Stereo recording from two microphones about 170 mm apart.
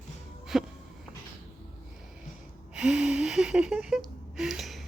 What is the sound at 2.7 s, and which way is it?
Gasp, 5° right (ahead or behind).